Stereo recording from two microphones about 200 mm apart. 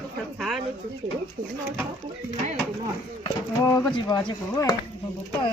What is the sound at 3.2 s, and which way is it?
Speech, 15° left (ahead or behind).